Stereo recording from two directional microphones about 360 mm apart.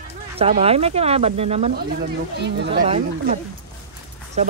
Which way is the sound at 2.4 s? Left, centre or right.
Right.